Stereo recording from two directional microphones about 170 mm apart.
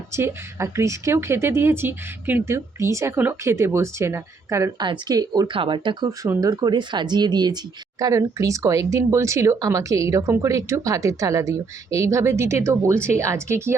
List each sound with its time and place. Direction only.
0.1 s speech: 15° right (ahead or behind)